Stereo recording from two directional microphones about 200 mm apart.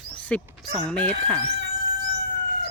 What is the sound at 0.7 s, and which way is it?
Speech, 5° left (ahead or behind).